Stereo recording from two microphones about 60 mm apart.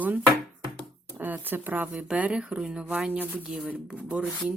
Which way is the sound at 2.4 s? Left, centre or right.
Centre.